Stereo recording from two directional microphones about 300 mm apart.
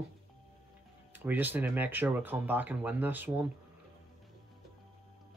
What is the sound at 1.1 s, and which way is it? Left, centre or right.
Speech, centre.